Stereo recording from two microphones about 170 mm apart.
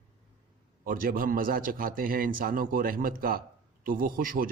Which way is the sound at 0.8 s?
55° right (ahead or behind).